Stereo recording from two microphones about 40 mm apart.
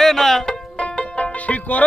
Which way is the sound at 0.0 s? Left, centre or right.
Centre.